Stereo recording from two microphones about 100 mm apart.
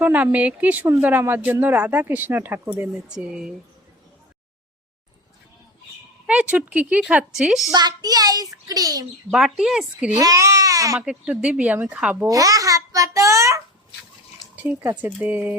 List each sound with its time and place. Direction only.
0.0 s speech: 15° right (ahead or behind)
6.2 s speech: 10° right (ahead or behind)
7.7 s a child's voice: 40° right (ahead or behind)
9.3 s speech: 5° right (ahead or behind)
10.2 s speech: 35° right (ahead or behind)
11.0 s speech: 10° right (ahead or behind)
12.3 s a child's voice: 35° right (ahead or behind)
14.5 s a sound: 15° right (ahead or behind)
14.8 s speech: 30° right (ahead or behind)
15.2 s speech: 15° right (ahead or behind)